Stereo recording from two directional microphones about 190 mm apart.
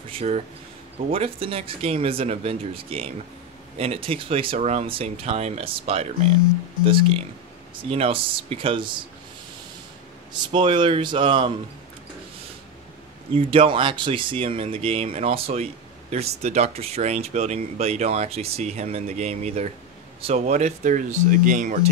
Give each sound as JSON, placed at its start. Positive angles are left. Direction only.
{"t": 0.1, "sound": "speech", "side_deg": -35}
{"t": 10.3, "sound": "speech", "side_deg": -25}
{"t": 13.3, "sound": "speech", "side_deg": -30}